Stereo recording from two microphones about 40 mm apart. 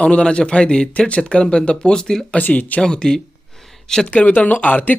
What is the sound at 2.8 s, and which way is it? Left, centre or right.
Speech, centre.